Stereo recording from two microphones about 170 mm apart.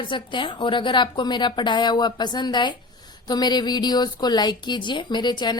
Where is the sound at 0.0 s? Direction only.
30° left (ahead or behind).